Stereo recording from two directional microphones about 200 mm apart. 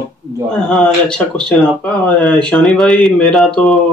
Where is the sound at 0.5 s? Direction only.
5° left (ahead or behind).